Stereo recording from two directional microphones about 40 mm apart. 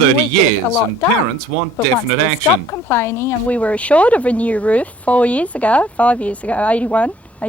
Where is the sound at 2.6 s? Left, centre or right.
Left.